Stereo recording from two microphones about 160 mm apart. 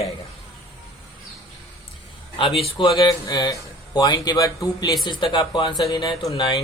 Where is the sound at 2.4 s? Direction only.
35° left (ahead or behind).